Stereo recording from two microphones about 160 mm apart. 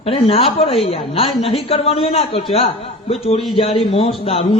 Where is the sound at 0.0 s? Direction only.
35° left (ahead or behind).